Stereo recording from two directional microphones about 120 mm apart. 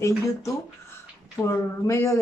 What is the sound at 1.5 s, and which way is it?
Speech, 25° left (ahead or behind).